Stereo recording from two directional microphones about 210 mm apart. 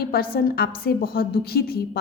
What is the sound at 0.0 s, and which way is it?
A woman's voice, 45° left (ahead or behind).